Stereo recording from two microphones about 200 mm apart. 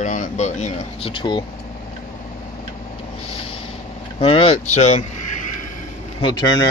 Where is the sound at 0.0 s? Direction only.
40° left (ahead or behind).